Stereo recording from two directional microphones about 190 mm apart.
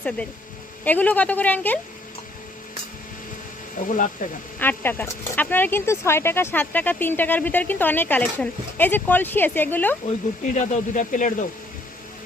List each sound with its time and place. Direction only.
0.9 s speech: 10° left (ahead or behind)
3.8 s speech: 45° left (ahead or behind)
4.6 s speech: 10° left (ahead or behind)
10.4 s speech: 40° left (ahead or behind)